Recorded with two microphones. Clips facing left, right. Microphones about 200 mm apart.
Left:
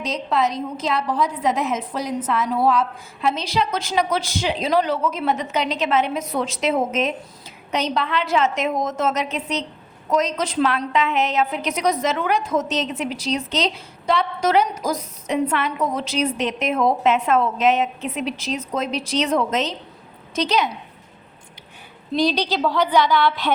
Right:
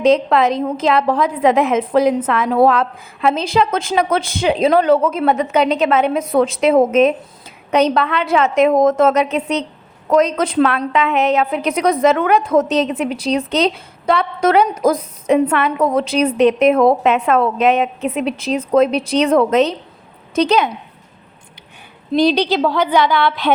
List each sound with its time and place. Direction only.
0.0 s a woman's voice: 55° right (ahead or behind)
22.1 s a woman's voice: 60° right (ahead or behind)